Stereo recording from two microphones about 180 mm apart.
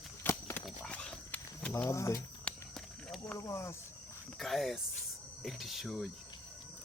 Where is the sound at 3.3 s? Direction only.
15° left (ahead or behind).